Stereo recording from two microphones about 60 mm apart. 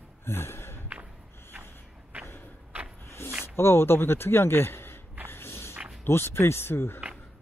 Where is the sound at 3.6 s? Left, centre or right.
Left.